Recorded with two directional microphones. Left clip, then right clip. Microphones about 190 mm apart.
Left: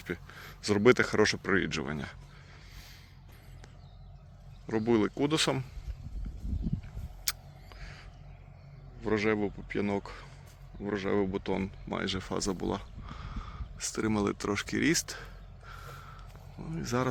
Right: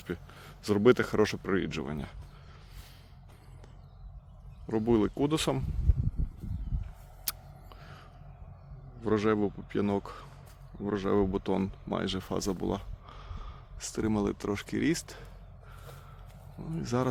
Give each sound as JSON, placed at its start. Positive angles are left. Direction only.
{"t": 0.0, "sound": "speech", "side_deg": -20}
{"t": 4.6, "sound": "speech", "side_deg": -20}
{"t": 7.3, "sound": "a sound", "side_deg": -25}
{"t": 9.0, "sound": "speech", "side_deg": -35}
{"t": 16.6, "sound": "speech", "side_deg": -20}